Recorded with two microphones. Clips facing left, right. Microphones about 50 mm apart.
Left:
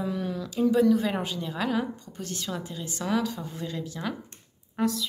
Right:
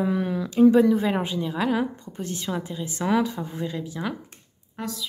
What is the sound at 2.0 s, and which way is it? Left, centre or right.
A woman's voice, right.